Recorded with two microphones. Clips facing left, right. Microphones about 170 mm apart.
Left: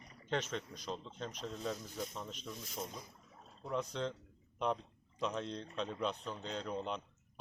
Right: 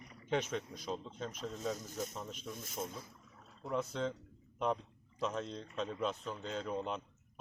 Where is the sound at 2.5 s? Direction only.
50° right (ahead or behind).